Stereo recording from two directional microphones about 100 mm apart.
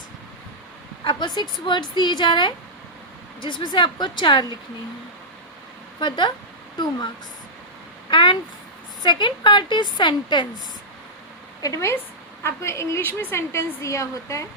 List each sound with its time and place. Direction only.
1.0 s a woman's voice: 45° left (ahead or behind)
6.0 s a woman's voice: 50° left (ahead or behind)
8.1 s a woman's voice: 55° left (ahead or behind)
11.6 s a woman's voice: 30° left (ahead or behind)